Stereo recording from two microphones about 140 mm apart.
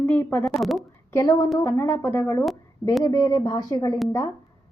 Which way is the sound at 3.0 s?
20° left (ahead or behind).